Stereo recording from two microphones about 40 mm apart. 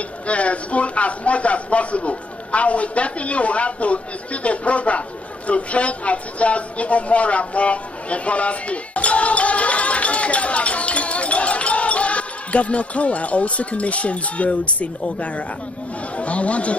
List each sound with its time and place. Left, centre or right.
0.3 s speech: left